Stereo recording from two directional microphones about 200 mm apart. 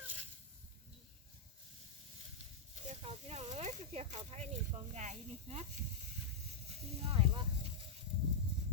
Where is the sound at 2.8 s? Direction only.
35° right (ahead or behind).